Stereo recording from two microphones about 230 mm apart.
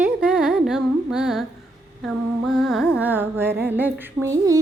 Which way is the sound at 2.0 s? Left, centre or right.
Centre.